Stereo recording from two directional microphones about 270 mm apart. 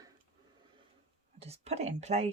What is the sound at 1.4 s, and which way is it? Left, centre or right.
Speech, right.